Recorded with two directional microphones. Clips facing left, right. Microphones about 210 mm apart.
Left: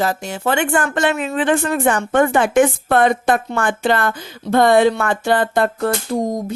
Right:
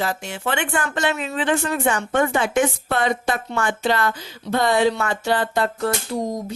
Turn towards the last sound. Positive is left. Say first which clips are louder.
# left 5 dB
turn(degrees=50)  # may be behind; listen again after turning